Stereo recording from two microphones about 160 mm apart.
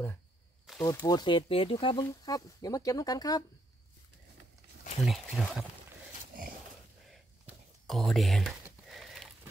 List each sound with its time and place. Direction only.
0.8 s speech: 20° left (ahead or behind)
5.0 s speech: centre (ahead or behind)
7.1 s a sound: centre (ahead or behind)